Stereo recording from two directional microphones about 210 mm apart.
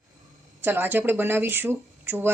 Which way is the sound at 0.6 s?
10° right (ahead or behind).